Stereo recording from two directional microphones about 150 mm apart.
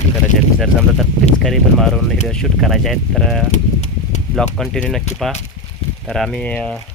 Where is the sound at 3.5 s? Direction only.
50° left (ahead or behind).